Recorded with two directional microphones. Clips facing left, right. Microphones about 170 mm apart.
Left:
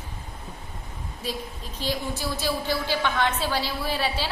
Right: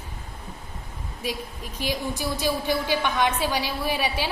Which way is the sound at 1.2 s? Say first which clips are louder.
Right 2 dB; 10° right (ahead or behind).